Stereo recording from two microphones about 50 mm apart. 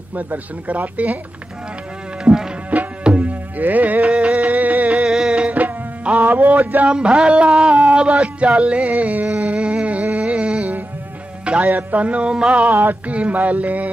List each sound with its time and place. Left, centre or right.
0.1 s speech: right
2.3 s music: centre
3.0 s music: right
4.9 s music: centre
5.5 s music: right
6.9 s music: centre
9.3 s a sound: right
10.1 s music: right
12.6 s speech: right